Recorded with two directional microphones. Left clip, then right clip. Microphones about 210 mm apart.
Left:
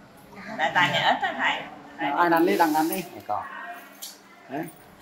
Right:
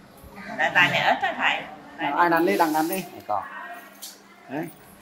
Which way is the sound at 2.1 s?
25° right (ahead or behind).